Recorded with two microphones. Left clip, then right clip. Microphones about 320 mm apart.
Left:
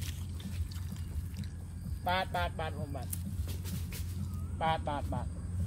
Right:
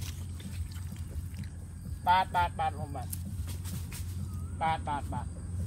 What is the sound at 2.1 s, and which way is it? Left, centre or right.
Speech, right.